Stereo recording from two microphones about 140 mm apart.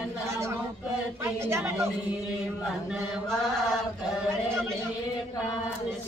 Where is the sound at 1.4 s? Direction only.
20° right (ahead or behind).